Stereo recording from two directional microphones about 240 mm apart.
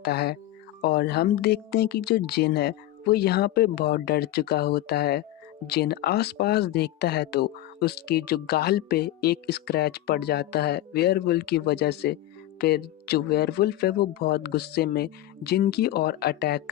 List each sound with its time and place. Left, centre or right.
0.0 s speech: left